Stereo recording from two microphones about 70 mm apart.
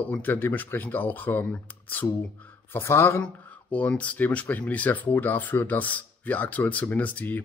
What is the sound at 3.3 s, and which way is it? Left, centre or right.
Speech, left.